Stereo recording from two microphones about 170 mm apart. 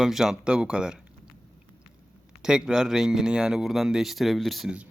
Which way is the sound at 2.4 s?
5° right (ahead or behind).